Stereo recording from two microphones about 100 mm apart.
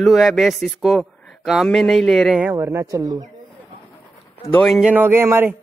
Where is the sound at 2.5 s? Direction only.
25° right (ahead or behind).